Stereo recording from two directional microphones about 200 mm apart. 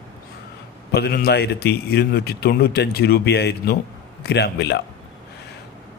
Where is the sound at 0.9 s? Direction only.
55° left (ahead or behind).